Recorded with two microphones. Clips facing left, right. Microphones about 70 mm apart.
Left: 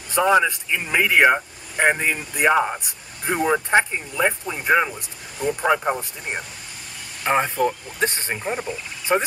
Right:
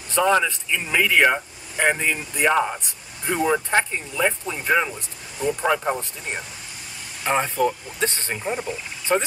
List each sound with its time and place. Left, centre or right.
0.1 s speech: centre
8.5 s speech: centre
9.1 s speech: centre